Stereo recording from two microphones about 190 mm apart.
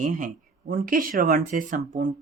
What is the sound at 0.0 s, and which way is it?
Speech, 45° right (ahead or behind).